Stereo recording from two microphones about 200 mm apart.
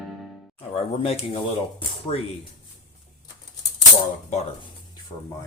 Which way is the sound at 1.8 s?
30° left (ahead or behind).